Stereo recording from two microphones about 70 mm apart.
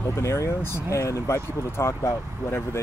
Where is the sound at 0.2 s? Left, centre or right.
Left.